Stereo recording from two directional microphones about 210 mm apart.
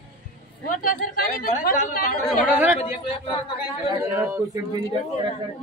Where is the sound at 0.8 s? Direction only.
40° left (ahead or behind).